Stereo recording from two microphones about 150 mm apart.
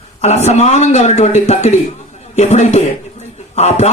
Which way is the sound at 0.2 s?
50° left (ahead or behind).